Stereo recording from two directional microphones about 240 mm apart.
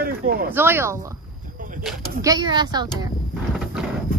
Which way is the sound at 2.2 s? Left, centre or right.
Centre.